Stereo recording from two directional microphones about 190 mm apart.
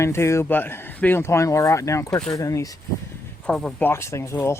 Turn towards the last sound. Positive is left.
turn(degrees=15)  # may be behind; listen again after turning